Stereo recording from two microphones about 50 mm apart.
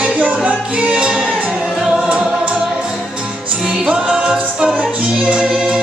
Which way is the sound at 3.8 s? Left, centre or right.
Right.